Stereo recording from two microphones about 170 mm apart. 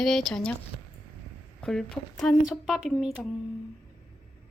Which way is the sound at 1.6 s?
5° left (ahead or behind).